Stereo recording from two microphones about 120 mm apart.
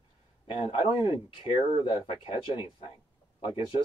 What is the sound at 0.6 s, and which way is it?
Speech, 45° left (ahead or behind).